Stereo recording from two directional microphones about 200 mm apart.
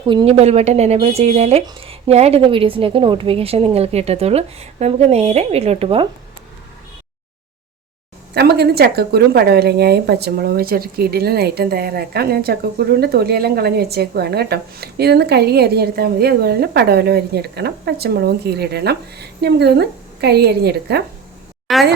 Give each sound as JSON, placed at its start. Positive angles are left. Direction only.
{"t": 0.1, "sound": "a woman's voice", "side_deg": -25}
{"t": 8.3, "sound": "speech", "side_deg": -55}
{"t": 21.7, "sound": "speech", "side_deg": 0}